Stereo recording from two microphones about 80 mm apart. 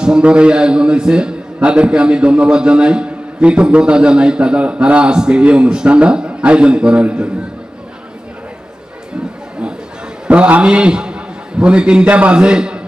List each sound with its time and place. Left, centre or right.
0.0 s a man's voice: centre
10.2 s a man's voice: centre